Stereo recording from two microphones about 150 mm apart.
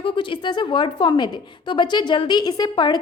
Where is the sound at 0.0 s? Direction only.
35° left (ahead or behind).